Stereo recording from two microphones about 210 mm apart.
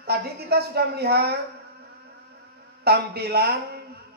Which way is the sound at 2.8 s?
50° right (ahead or behind).